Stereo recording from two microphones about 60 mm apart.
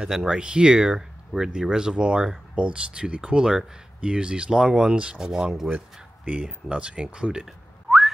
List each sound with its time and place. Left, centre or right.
0.1 s speech: centre
6.7 s speech: centre
7.4 s whistling: centre